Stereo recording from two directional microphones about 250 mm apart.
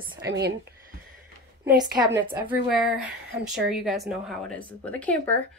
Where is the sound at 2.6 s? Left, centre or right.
Centre.